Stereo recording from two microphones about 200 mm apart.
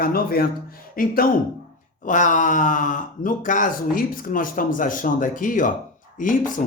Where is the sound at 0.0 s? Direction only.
50° left (ahead or behind).